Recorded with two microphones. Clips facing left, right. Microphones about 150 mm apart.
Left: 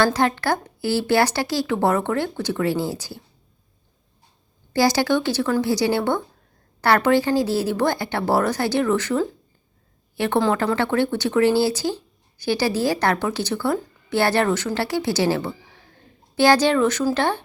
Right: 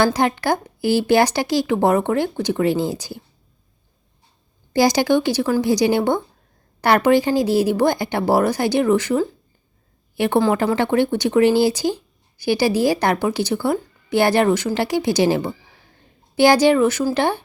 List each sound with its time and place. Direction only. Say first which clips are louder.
0.0 s speech: right 2 dB; 15° right (ahead or behind)
4.7 s speech: right 3 dB; 15° right (ahead or behind)